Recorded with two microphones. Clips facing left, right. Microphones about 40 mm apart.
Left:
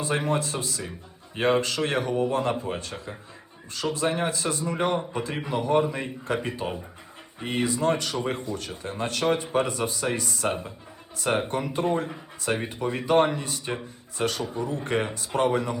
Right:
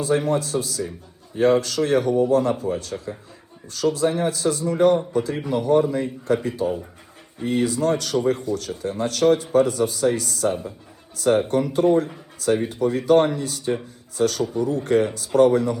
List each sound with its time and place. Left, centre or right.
0.0 s speech: left